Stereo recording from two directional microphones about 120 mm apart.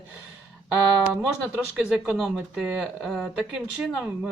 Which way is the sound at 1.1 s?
10° right (ahead or behind).